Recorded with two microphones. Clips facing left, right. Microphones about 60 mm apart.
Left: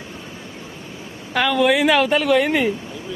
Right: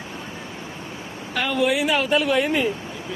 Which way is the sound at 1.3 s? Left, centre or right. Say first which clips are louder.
Left 4 dB; left.